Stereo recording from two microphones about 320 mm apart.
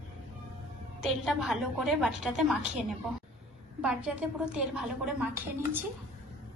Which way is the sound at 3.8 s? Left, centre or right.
Centre.